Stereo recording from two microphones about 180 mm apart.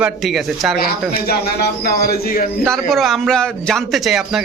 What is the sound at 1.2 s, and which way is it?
Speech, 60° left (ahead or behind).